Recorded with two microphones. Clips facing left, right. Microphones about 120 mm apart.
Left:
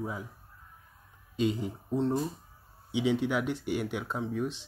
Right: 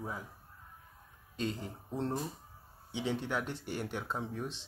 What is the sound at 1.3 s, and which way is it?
Speech, 10° left (ahead or behind).